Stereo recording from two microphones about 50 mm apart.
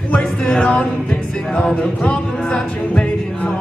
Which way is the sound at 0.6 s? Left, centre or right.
Left.